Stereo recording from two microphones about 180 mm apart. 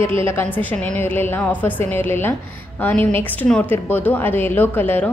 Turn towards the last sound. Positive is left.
turn(degrees=10)  # may be behind; listen again after turning